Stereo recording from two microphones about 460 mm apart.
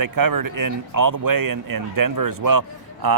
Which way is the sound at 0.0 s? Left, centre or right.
Right.